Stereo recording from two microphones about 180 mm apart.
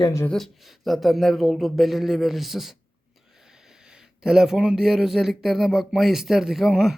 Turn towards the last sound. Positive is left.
turn(degrees=0)  # may be behind; listen again after turning